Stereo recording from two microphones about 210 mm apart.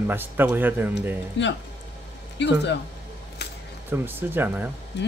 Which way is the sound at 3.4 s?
50° left (ahead or behind).